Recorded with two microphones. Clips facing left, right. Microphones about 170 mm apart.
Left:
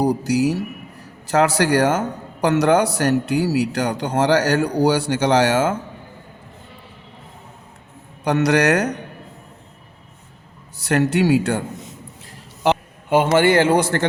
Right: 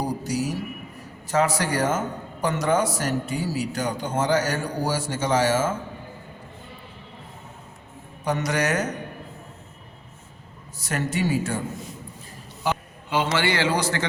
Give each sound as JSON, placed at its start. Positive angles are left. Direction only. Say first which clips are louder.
{"t": 0.0, "sound": "a man's voice", "louder": "left 8 dB", "side_deg": 70}
{"t": 8.2, "sound": "a man's voice", "louder": "left 8 dB", "side_deg": 70}
{"t": 10.8, "sound": "a man's voice", "louder": "left 8 dB", "side_deg": 70}
{"t": 12.7, "sound": "a sound", "louder": "left 8 dB", "side_deg": 75}
{"t": 13.1, "sound": "a man's voice", "louder": "left 8 dB", "side_deg": 50}